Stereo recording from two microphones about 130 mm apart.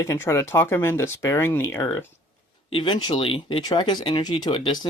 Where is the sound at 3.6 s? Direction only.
35° left (ahead or behind).